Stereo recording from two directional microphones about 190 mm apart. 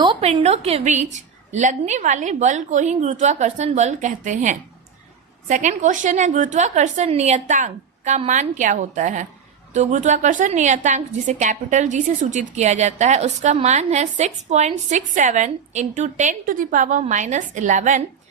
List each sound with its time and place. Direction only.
0.0 s a woman's voice: 30° right (ahead or behind)